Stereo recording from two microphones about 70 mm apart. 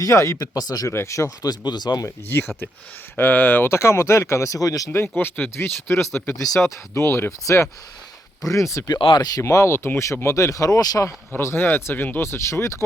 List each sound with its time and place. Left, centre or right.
0.0 s speech: left
0.3 s speech: left
0.9 s speech: left
1.4 s speech: left
2.0 s speech: left
5.1 s speech: left
6.2 s speech: left
6.6 s speech: left
8.9 s speech: left
9.4 s speech: left
11.3 s speech: left